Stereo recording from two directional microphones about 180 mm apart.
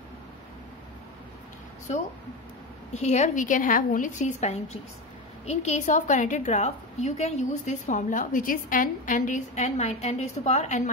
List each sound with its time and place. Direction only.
2.9 s a woman's voice: 40° left (ahead or behind)